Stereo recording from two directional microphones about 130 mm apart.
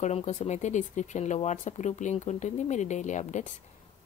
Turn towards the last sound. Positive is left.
turn(degrees=65)  # may be behind; listen again after turning